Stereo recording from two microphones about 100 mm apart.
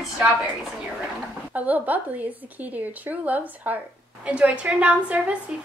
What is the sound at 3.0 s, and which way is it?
A woman's voice, 15° right (ahead or behind).